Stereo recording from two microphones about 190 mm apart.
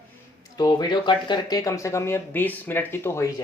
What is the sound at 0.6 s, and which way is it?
Speech, 20° left (ahead or behind).